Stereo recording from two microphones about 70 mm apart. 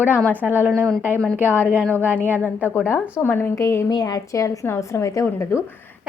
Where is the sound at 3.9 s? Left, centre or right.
Left.